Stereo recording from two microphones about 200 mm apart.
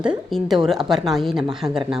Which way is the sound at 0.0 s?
Centre (ahead or behind).